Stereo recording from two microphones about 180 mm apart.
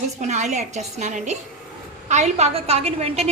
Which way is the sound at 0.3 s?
40° right (ahead or behind).